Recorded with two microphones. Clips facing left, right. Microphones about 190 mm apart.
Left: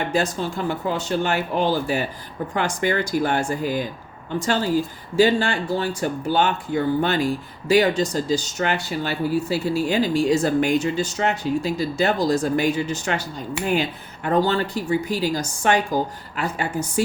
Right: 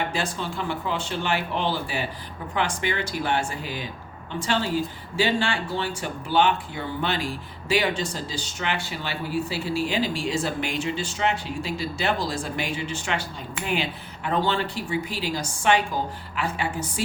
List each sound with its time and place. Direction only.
0.1 s speech: 40° left (ahead or behind)
14.3 s speech: 40° left (ahead or behind)